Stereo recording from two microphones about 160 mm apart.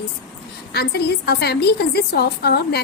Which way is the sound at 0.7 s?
85° left.